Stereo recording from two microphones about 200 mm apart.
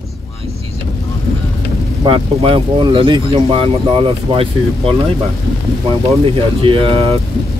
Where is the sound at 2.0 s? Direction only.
25° right (ahead or behind).